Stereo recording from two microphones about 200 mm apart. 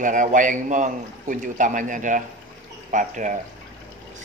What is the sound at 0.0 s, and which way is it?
Speech, 40° right (ahead or behind).